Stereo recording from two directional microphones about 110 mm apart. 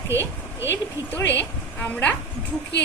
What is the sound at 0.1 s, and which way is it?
Speech, 25° right (ahead or behind).